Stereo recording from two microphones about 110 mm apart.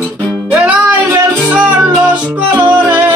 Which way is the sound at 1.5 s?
10° right (ahead or behind).